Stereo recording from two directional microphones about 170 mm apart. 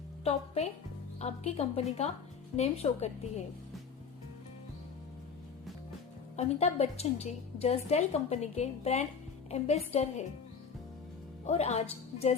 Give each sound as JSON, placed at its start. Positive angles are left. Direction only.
{"t": 0.3, "sound": "a woman's voice", "side_deg": 35}
{"t": 6.3, "sound": "a woman's voice", "side_deg": 40}
{"t": 11.4, "sound": "a woman's voice", "side_deg": 40}